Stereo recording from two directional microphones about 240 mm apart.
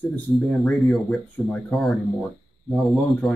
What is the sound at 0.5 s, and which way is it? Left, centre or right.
Speech, centre.